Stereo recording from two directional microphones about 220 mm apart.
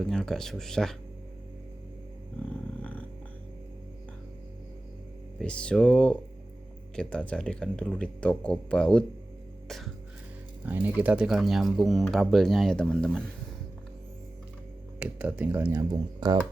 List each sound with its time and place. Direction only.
0.0 s speech: centre (ahead or behind)
5.4 s speech: 5° left (ahead or behind)
9.6 s music: centre (ahead or behind)
10.7 s speech: 5° right (ahead or behind)
14.9 s speech: 5° right (ahead or behind)
16.2 s speech: 20° right (ahead or behind)